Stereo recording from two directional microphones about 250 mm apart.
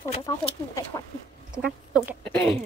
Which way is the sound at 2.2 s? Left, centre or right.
Centre.